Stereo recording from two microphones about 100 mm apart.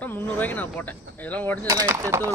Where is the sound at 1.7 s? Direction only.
30° right (ahead or behind).